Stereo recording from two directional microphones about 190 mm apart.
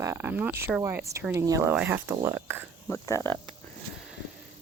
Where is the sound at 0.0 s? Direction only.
15° right (ahead or behind).